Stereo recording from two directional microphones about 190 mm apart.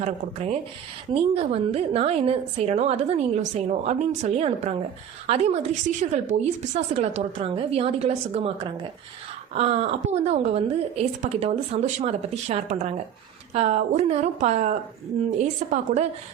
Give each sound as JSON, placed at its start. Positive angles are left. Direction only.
{"t": 0.0, "sound": "a woman's voice", "side_deg": -35}